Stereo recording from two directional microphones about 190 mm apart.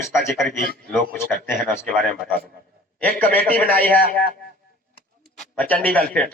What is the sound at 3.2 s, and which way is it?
Speech, 10° left (ahead or behind).